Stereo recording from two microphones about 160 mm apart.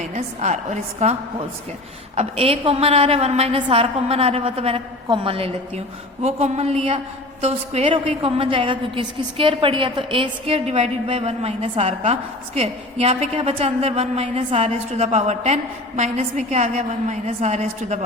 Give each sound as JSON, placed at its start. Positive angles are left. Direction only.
{"t": 0.0, "sound": "a woman's voice", "side_deg": -45}
{"t": 2.1, "sound": "a woman's voice", "side_deg": -40}